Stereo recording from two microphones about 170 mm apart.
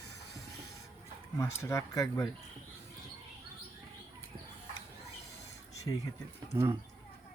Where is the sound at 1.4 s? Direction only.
15° left (ahead or behind).